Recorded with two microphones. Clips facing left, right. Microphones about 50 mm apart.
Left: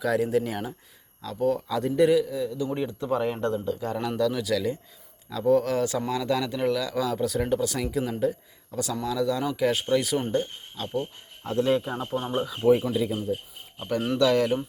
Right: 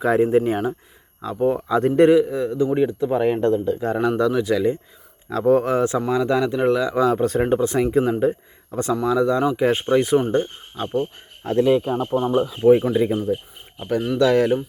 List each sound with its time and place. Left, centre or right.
0.0 s speech: right
1.8 s a man's voice: right
2.0 s speech: right
2.6 s speech: centre
5.3 s speech: right
5.6 s speech: right
11.8 s speech: right
13.7 s speech: centre